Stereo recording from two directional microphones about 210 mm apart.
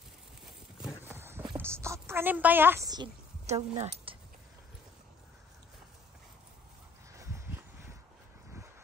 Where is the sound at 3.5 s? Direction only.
30° right (ahead or behind).